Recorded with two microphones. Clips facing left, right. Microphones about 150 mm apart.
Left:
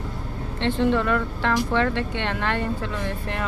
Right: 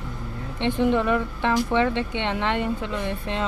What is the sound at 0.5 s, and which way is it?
Speech, 15° right (ahead or behind).